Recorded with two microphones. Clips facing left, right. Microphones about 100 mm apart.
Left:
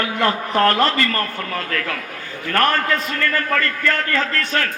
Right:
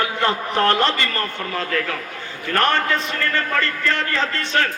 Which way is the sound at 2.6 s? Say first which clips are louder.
Even; 20° right (ahead or behind).